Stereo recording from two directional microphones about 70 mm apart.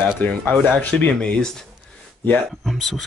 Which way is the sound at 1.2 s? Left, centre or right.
Centre.